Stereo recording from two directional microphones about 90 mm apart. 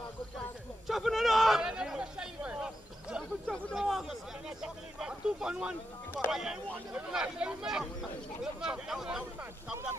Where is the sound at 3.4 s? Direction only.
10° left (ahead or behind).